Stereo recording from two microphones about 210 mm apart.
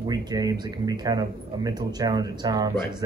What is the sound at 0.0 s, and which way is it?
Speech, 20° right (ahead or behind).